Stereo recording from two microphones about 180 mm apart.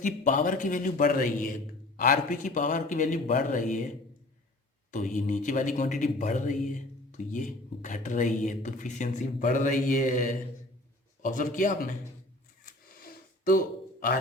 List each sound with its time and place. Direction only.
0.0 s speech: 45° left (ahead or behind)
4.9 s speech: 45° left (ahead or behind)
12.6 s a sound: 55° left (ahead or behind)